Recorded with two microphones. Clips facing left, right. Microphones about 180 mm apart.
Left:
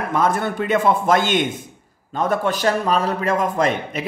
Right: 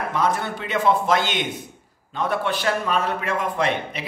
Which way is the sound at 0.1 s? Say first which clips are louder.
Left 4 dB; 50° left (ahead or behind).